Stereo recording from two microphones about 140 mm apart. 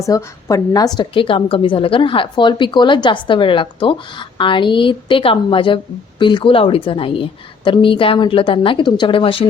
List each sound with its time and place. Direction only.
0.0 s a woman's voice: 25° left (ahead or behind); by 9.5 s 40° left (ahead or behind)